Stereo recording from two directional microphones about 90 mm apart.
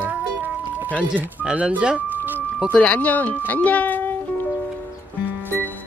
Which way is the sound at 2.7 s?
15° left (ahead or behind).